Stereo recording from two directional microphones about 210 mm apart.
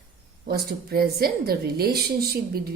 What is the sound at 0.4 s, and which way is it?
A woman's voice, 45° right (ahead or behind).